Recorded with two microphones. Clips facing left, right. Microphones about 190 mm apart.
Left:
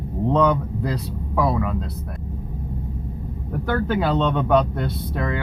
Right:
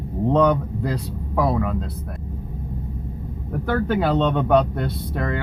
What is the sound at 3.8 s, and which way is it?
Speech, 55° right (ahead or behind).